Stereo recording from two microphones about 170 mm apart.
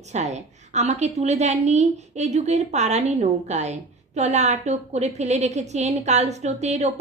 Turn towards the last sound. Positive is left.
turn(degrees=-40)  # may be behind; listen again after turning